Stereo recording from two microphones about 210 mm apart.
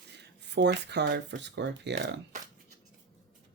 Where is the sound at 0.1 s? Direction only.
55° right (ahead or behind).